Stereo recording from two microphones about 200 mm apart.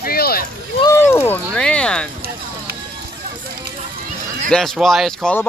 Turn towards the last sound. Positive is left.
turn(degrees=5)  # may be behind; listen again after turning